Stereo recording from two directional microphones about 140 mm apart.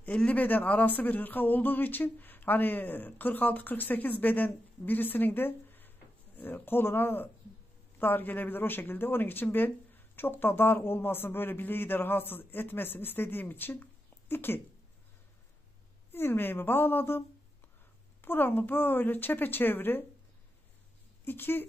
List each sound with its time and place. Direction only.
0.0 s speech: 10° left (ahead or behind)
16.1 s speech: 15° left (ahead or behind)
18.2 s speech: 15° left (ahead or behind)
21.2 s speech: 15° left (ahead or behind)